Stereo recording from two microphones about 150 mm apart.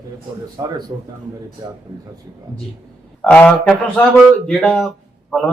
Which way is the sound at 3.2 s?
10° left (ahead or behind).